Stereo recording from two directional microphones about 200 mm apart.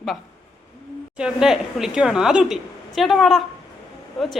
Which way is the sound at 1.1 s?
5° right (ahead or behind).